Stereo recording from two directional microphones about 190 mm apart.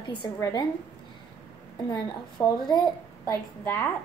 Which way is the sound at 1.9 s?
20° left (ahead or behind).